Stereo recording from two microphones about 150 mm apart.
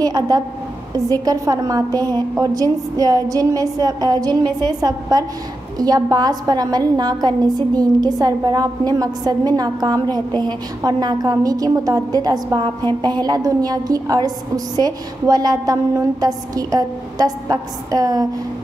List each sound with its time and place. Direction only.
0.0 s a woman's voice: 25° right (ahead or behind)